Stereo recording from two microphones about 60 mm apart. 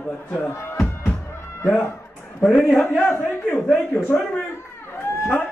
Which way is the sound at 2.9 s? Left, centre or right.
Left.